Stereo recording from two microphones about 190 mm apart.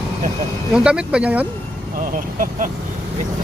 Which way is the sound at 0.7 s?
5° right (ahead or behind).